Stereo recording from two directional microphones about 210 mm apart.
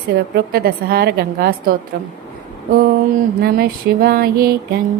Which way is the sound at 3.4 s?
45° right (ahead or behind).